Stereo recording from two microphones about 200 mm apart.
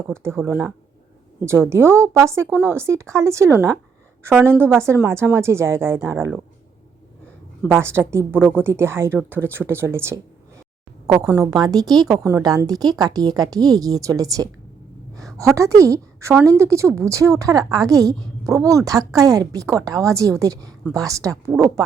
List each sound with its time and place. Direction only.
0.1 s a woman's voice: 15° right (ahead or behind)
7.6 s a woman's voice: 10° right (ahead or behind)
11.3 s a woman's voice: 15° right (ahead or behind)